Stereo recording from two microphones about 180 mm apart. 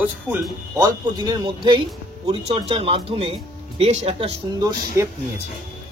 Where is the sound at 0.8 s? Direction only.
20° right (ahead or behind).